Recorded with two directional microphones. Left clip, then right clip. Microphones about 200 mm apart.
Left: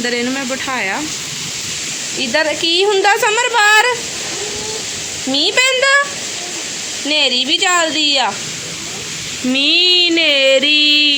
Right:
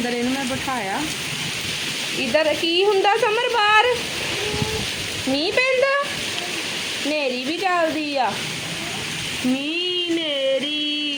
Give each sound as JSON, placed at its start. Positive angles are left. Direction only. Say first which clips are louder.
{"t": 0.7, "sound": "speech", "louder": "left 8 dB", "side_deg": 10}
{"t": 2.3, "sound": "speech", "louder": "left 4 dB", "side_deg": 5}
{"t": 5.5, "sound": "speech", "louder": "left 6 dB", "side_deg": 5}
{"t": 7.1, "sound": "speech", "louder": "left 12 dB", "side_deg": 5}
{"t": 9.6, "sound": "a sound", "louder": "left 12 dB", "side_deg": 10}
{"t": 10.7, "sound": "music", "louder": "left 13 dB", "side_deg": 60}